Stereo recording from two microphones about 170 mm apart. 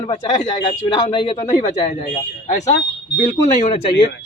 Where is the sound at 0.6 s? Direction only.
25° left (ahead or behind).